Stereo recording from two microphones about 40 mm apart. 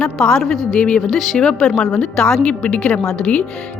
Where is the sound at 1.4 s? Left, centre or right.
Centre.